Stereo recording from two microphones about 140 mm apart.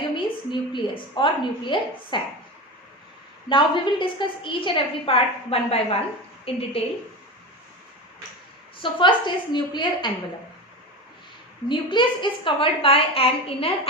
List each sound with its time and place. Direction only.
0.3 s a woman's voice: 35° left (ahead or behind)
3.5 s a woman's voice: 35° left (ahead or behind)
8.8 s a woman's voice: 35° left (ahead or behind)
11.7 s a woman's voice: 35° left (ahead or behind)